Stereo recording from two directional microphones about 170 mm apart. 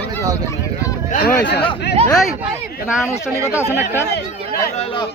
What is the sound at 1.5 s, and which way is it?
Speech, 75° left (ahead or behind).